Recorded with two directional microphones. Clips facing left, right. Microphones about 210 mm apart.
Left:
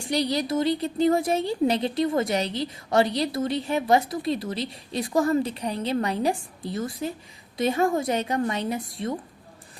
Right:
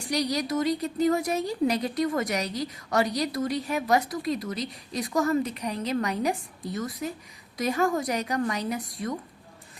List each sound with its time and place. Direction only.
0.1 s a woman's voice: 30° left (ahead or behind)